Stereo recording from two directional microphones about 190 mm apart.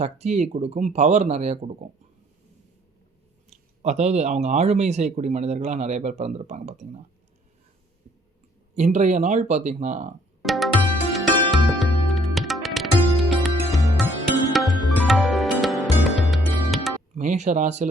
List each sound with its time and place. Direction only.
0.0 s speech: 35° right (ahead or behind)
3.8 s speech: 35° right (ahead or behind)
8.7 s speech: 35° right (ahead or behind)
10.4 s music: centre (ahead or behind)
17.2 s speech: 40° right (ahead or behind)